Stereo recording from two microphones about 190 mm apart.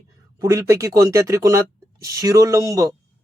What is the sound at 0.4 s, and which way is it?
Speech, 15° right (ahead or behind).